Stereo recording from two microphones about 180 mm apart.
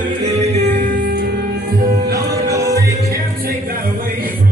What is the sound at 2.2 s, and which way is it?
Music, 20° right (ahead or behind).